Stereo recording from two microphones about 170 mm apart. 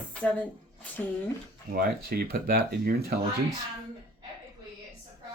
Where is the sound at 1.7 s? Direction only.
65° right (ahead or behind).